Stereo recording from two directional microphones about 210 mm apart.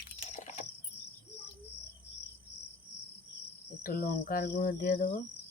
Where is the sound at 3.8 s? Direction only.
40° left (ahead or behind).